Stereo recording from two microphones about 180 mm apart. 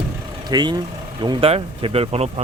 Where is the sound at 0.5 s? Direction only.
25° right (ahead or behind).